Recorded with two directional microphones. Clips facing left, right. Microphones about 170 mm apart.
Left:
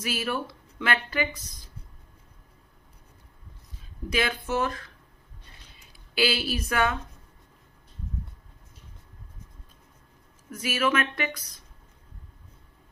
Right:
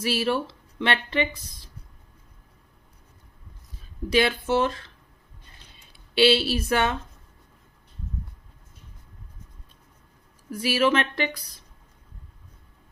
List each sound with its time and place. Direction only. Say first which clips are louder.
0.0 s speech: right 5 dB; 30° right (ahead or behind)
4.1 s speech: right 6 dB; 30° right (ahead or behind)
5.9 s speech: right 7 dB; 30° right (ahead or behind)
10.5 s speech: right 4 dB; 30° right (ahead or behind)